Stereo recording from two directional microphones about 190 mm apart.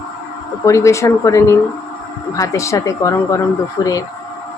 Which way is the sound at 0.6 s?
15° left (ahead or behind).